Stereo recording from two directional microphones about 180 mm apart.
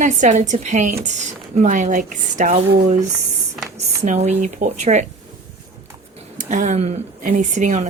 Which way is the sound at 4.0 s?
40° right (ahead or behind).